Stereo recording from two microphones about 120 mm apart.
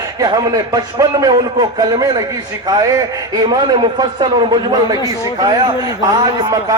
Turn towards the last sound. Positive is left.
turn(degrees=-35)  # may be behind; listen again after turning